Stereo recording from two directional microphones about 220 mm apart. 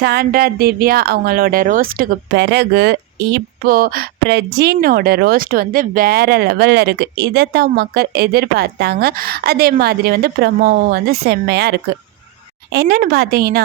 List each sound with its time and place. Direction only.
0.0 s speech: 45° right (ahead or behind)